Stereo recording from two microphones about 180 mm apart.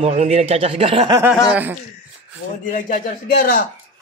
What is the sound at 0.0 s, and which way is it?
Speech, 35° right (ahead or behind).